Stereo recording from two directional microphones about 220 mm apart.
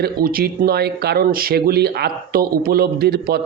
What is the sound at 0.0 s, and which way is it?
Speech, 40° right (ahead or behind).